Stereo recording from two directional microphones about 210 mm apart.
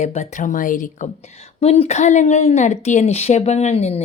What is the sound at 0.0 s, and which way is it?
Speech, 35° left (ahead or behind).